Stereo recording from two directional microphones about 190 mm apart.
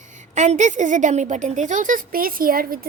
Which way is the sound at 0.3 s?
40° right (ahead or behind).